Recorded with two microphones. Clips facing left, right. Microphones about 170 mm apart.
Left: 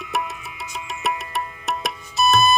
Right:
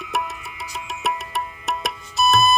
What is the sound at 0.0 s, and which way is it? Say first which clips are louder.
Music: even; centre (ahead or behind).